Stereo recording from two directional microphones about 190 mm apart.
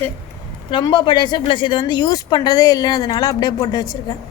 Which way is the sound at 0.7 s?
25° left (ahead or behind).